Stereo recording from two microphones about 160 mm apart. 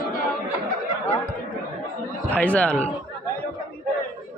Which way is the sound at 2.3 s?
10° left (ahead or behind).